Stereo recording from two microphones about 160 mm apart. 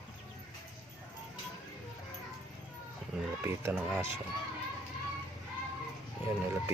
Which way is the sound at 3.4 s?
15° right (ahead or behind).